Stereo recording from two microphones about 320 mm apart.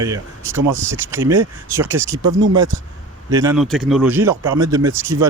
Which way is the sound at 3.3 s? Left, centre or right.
Centre.